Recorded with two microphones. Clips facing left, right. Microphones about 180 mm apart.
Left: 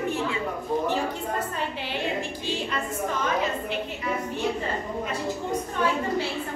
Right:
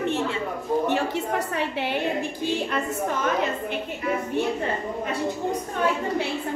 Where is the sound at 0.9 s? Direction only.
70° right (ahead or behind).